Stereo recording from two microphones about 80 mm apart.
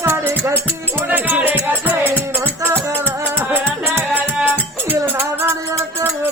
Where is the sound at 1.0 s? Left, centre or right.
Right.